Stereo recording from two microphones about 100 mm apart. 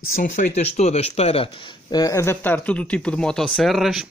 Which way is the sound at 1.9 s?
40° left (ahead or behind).